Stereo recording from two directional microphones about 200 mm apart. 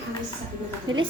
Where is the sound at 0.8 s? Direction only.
20° right (ahead or behind).